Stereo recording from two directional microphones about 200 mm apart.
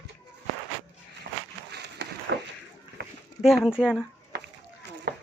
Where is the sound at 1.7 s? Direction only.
55° right (ahead or behind).